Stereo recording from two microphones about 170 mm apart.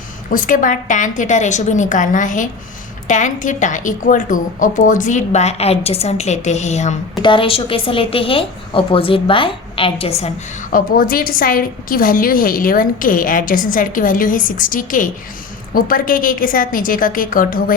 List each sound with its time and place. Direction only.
0.3 s a woman's voice: 50° left (ahead or behind)
7.2 s a woman's voice: 30° left (ahead or behind)
10.7 s a woman's voice: 55° left (ahead or behind)